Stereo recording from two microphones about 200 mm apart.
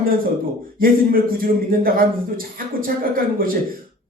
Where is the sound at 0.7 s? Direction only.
45° right (ahead or behind).